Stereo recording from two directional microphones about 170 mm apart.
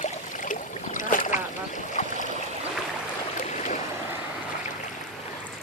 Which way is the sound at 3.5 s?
45° left (ahead or behind).